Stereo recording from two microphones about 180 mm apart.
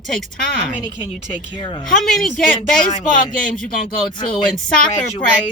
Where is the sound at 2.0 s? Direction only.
Centre (ahead or behind).